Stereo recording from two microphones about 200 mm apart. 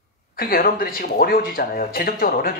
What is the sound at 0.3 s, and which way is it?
Speech, 45° left (ahead or behind).